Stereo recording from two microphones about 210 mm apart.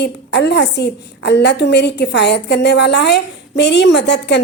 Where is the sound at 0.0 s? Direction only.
55° left (ahead or behind).